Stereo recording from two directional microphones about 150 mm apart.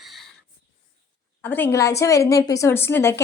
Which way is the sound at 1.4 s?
15° left (ahead or behind).